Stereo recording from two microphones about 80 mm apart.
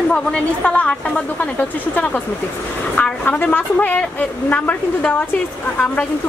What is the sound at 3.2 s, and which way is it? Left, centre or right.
A woman's voice, left.